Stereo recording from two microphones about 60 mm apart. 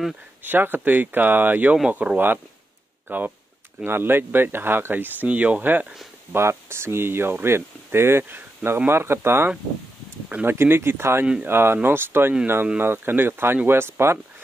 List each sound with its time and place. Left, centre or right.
0.4 s speech: right
6.3 s speech: right